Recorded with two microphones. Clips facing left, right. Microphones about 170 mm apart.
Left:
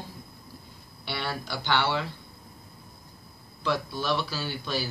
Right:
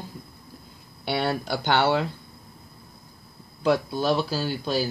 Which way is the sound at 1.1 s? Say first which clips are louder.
Right 8 dB; 50° right (ahead or behind).